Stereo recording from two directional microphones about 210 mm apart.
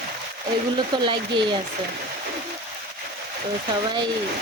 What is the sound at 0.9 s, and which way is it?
Speech, 20° right (ahead or behind).